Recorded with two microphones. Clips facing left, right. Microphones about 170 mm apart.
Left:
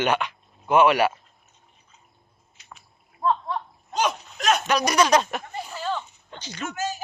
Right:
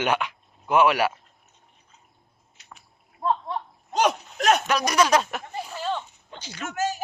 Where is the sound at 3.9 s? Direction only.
60° right (ahead or behind).